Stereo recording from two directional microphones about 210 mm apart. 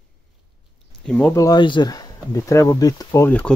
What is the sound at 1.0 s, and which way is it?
Speech, 5° left (ahead or behind).